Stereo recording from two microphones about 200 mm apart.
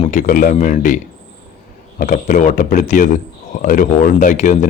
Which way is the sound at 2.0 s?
40° left (ahead or behind).